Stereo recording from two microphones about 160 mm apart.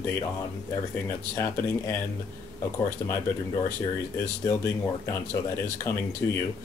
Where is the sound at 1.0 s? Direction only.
15° left (ahead or behind).